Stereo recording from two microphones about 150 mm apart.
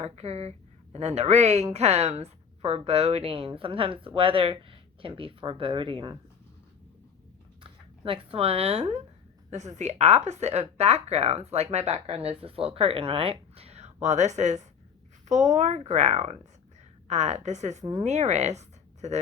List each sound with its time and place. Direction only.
0.0 s a woman's voice: 45° right (ahead or behind)
7.6 s speech: 35° right (ahead or behind)